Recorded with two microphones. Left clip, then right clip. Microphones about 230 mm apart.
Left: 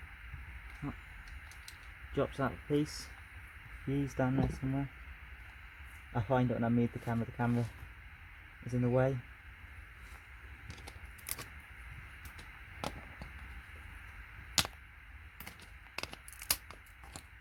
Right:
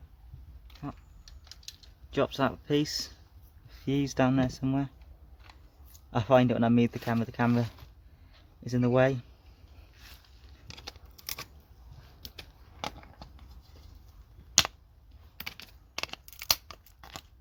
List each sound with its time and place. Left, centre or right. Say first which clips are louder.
0.8 s speech: right 3 dB; centre
2.1 s speech: right 7 dB; right
4.2 s speech: right 8 dB; right
6.1 s speech: right 9 dB; right
8.9 s speech: right 7 dB; right
10.7 s a sound: right 8 dB; centre
14.6 s a sound: right 8 dB; centre
16.5 s crunch: right 9 dB; centre